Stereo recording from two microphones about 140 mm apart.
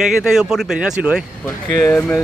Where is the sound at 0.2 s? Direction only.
5° right (ahead or behind).